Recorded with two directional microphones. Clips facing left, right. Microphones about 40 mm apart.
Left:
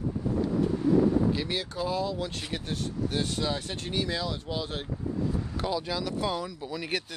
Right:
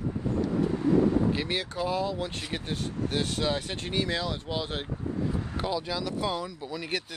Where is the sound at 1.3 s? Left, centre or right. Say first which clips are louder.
Right 1 dB; right.